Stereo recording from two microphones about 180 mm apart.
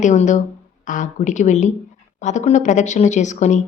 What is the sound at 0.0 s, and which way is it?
Speech, 45° left (ahead or behind).